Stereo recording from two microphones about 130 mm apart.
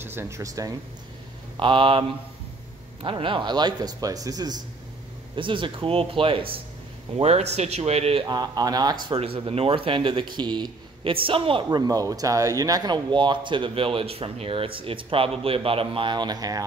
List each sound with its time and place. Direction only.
0.0 s speech: 20° right (ahead or behind)
1.6 s speech: 40° right (ahead or behind)
7.2 s speech: 55° right (ahead or behind)
8.3 s speech: 30° right (ahead or behind)
9.2 s speech: 45° right (ahead or behind)
11.9 s speech: 30° right (ahead or behind)